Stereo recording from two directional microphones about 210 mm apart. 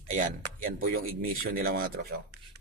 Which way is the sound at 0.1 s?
40° right (ahead or behind).